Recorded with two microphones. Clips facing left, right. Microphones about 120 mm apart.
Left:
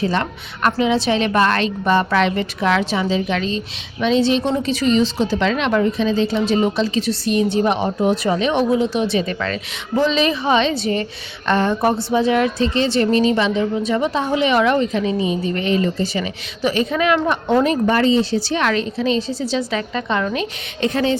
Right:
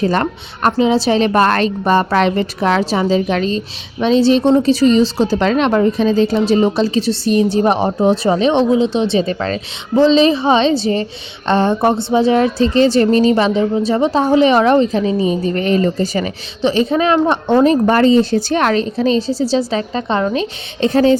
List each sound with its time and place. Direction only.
0.0 s a woman's voice: 45° right (ahead or behind)
16.6 s a woman's voice: 30° right (ahead or behind)